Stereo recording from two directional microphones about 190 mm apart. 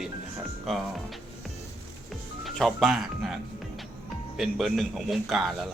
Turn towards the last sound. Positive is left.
turn(degrees=0)  # may be behind; listen again after turning